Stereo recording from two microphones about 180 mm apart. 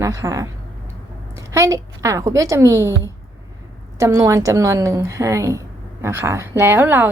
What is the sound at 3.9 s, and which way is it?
A woman's voice, 15° right (ahead or behind).